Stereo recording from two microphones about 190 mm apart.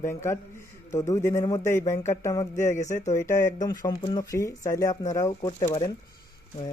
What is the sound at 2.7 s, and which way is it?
Speech, 40° left (ahead or behind).